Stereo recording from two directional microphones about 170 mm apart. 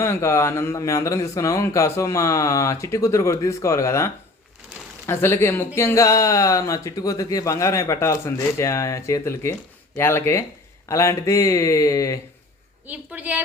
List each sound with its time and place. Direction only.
0.0 s speech: 15° left (ahead or behind)
12.9 s a woman's voice: 10° right (ahead or behind)